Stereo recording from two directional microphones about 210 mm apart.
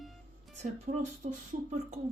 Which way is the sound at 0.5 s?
35° right (ahead or behind).